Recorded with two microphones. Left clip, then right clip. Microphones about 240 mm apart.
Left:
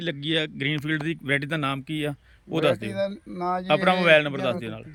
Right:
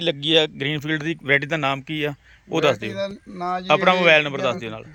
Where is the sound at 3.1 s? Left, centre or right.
Left.